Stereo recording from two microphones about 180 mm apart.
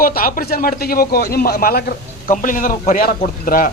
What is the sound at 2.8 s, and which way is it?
Speech, 55° left (ahead or behind).